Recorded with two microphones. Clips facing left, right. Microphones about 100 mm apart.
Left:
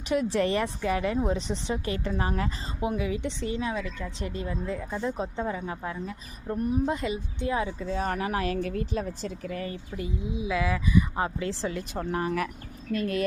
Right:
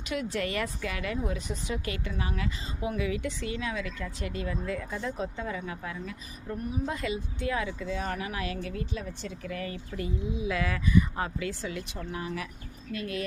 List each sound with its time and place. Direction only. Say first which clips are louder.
0.1 s a woman's voice: left 6 dB; 30° left (ahead or behind)
2.8 s a woman's voice: left 2 dB; 25° left (ahead or behind)
9.9 s speech: right 1 dB; 20° left (ahead or behind)
11.2 s a woman's voice: left 4 dB; 30° left (ahead or behind)
11.9 s speech: left 7 dB; 55° left (ahead or behind)
12.9 s a woman's voice: left 6 dB; 40° left (ahead or behind)